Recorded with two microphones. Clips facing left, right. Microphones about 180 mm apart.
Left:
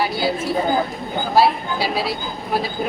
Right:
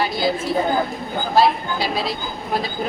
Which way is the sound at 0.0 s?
10° left (ahead or behind).